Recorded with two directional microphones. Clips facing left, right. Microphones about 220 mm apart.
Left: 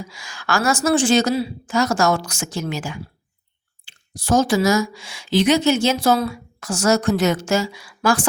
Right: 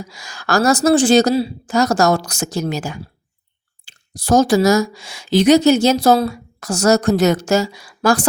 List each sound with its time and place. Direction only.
0.0 s speech: 40° right (ahead or behind)